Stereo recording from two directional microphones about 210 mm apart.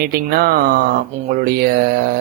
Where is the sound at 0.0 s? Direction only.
45° right (ahead or behind).